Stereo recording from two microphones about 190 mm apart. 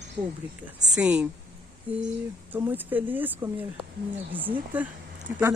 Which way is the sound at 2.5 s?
10° right (ahead or behind).